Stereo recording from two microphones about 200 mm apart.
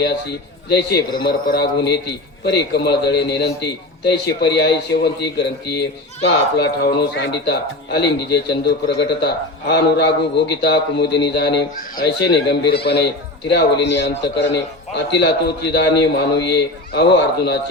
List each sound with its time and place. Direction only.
0.0 s a man's voice: 55° left (ahead or behind)